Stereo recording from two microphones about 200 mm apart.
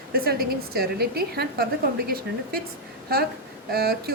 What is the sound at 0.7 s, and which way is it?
A woman's voice, 50° right (ahead or behind).